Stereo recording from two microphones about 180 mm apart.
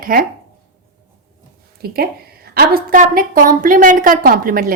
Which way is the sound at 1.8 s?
60° right (ahead or behind).